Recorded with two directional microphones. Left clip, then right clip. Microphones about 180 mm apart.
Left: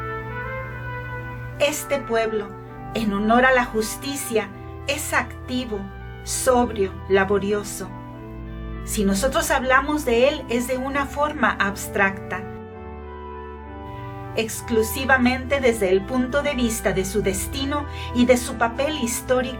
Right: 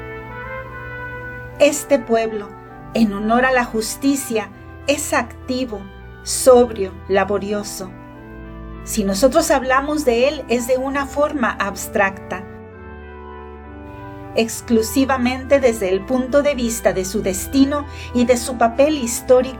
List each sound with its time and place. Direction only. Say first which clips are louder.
1.5 s a woman's voice: right 7 dB; 45° right (ahead or behind)
8.9 s a woman's voice: right 6 dB; 45° right (ahead or behind)
14.3 s a woman's voice: right 4 dB; 45° right (ahead or behind)